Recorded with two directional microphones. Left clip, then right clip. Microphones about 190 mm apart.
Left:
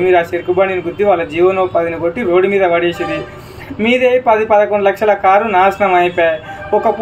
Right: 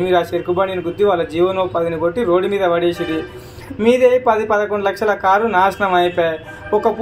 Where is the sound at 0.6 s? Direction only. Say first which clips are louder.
Left 4 dB; 35° right (ahead or behind).